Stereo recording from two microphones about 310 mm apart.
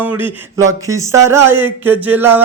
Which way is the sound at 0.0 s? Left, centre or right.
Centre.